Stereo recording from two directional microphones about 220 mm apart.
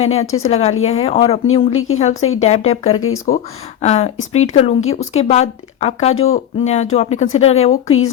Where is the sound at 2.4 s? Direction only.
30° left (ahead or behind).